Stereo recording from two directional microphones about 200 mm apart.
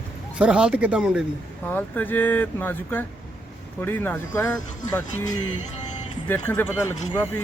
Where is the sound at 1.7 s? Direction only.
10° left (ahead or behind).